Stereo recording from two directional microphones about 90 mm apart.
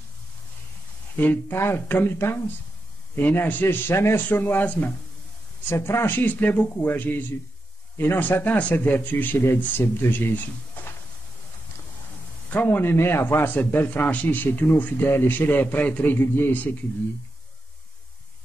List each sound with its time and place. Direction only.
1.1 s a man's voice: 20° left (ahead or behind)
5.7 s a man's voice: 30° left (ahead or behind)
12.6 s a man's voice: 25° left (ahead or behind)